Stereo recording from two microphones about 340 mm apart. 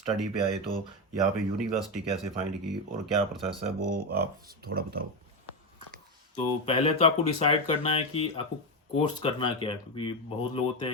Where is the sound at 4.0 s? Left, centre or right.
Right.